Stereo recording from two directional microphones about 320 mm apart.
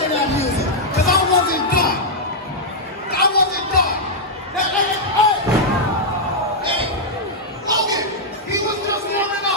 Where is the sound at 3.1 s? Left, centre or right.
Left.